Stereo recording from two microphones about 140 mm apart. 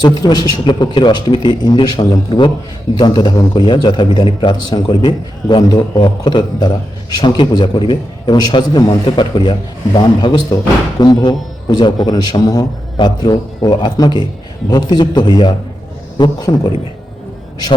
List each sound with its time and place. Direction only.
0.2 s a man's voice: 30° left (ahead or behind)